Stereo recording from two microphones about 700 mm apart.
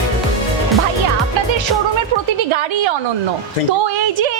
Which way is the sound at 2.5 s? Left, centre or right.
Right.